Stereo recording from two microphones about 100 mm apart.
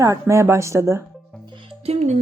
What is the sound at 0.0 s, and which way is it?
A woman's voice, 30° right (ahead or behind).